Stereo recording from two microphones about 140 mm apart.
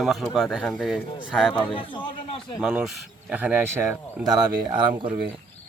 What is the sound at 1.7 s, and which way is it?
Speech, 40° left (ahead or behind).